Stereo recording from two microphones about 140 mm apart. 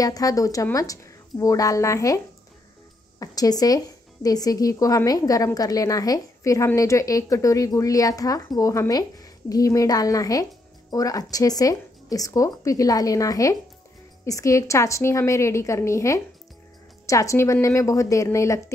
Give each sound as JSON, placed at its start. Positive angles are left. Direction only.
{"t": 0.0, "sound": "a woman's voice", "side_deg": 25}